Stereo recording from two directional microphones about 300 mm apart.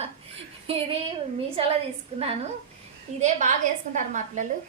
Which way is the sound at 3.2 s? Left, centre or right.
Right.